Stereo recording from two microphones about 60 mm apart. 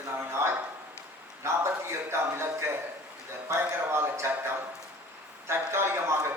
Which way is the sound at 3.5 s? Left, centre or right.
Right.